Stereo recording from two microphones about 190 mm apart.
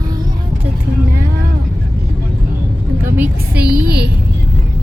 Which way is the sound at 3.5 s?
55° right (ahead or behind).